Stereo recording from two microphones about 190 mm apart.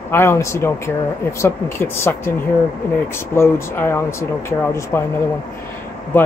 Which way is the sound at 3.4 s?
15° left (ahead or behind).